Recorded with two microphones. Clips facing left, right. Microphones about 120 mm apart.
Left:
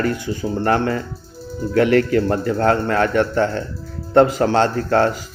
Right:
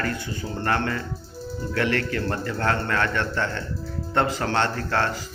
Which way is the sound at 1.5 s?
Centre (ahead or behind).